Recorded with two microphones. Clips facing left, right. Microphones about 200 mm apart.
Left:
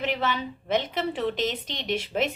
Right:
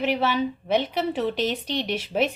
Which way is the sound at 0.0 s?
10° right (ahead or behind).